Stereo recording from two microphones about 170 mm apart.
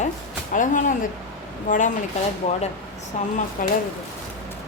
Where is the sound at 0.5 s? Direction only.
50° left (ahead or behind).